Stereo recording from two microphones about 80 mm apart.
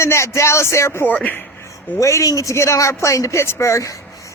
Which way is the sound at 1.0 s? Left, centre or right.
Centre.